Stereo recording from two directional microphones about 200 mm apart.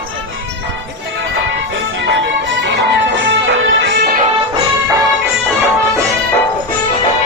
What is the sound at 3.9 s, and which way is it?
Music, 50° right (ahead or behind).